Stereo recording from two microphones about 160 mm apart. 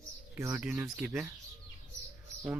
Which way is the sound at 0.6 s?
5° right (ahead or behind).